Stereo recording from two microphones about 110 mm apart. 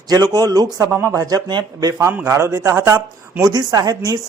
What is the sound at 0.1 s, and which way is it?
A man's voice, 35° right (ahead or behind).